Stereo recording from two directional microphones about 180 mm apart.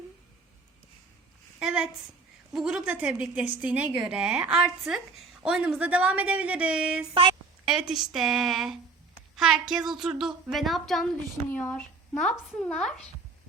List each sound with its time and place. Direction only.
1.5 s a sound: 5° right (ahead or behind)
2.5 s a woman's voice: 5° right (ahead or behind)
7.1 s speech: 30° right (ahead or behind)
7.6 s a woman's voice: 5° right (ahead or behind)